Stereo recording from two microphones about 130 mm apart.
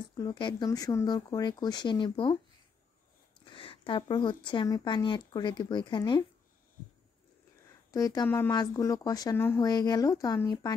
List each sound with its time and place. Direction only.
0.1 s speech: 35° left (ahead or behind)
3.4 s speech: 40° left (ahead or behind)
7.9 s speech: 30° left (ahead or behind)